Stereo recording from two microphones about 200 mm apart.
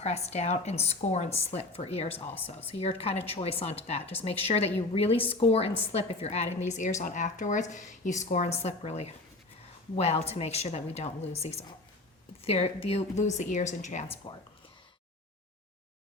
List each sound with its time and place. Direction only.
0.0 s a woman's voice: 35° left (ahead or behind)
2.0 s speech: 10° left (ahead or behind)
2.7 s a woman's voice: 30° left (ahead or behind)